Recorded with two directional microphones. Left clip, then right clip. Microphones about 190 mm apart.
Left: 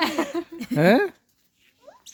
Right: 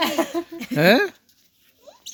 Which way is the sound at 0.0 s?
50° right (ahead or behind).